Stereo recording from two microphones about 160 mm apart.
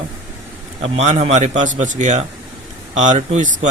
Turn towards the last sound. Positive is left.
turn(degrees=-45)  # may be behind; listen again after turning